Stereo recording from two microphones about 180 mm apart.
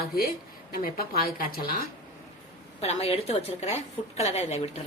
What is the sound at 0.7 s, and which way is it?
Speech, 55° left (ahead or behind).